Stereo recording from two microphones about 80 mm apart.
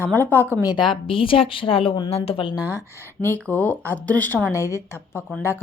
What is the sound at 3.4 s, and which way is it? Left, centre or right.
Speech, centre.